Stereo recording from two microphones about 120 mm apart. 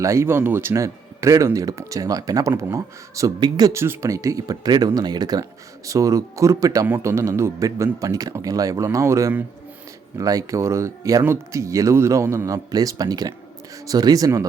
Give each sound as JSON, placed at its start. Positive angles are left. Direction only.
{"t": 0.0, "sound": "speech", "side_deg": -25}